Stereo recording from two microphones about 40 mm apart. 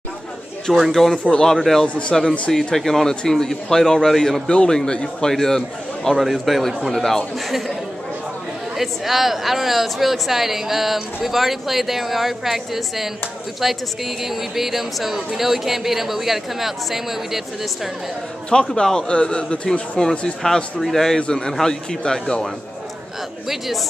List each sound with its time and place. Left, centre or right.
0.9 s a woman's voice: centre
1.2 s a man's voice: centre
1.6 s a man's voice: centre
4.5 s a man's voice: left
5.0 s a man's voice: centre
6.1 s a woman's voice: centre
8.7 s a woman's voice: centre
18.8 s a man's voice: centre
21.2 s a man's voice: left